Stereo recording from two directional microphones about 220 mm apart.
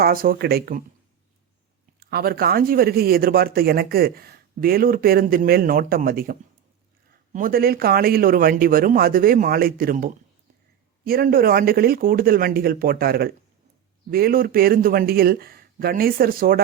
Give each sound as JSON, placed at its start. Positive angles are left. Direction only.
{"t": 0.0, "sound": "speech", "side_deg": -40}
{"t": 2.0, "sound": "speech", "side_deg": -45}
{"t": 7.3, "sound": "speech", "side_deg": -40}